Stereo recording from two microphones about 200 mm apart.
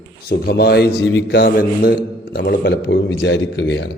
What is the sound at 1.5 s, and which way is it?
Mantra, 50° left (ahead or behind).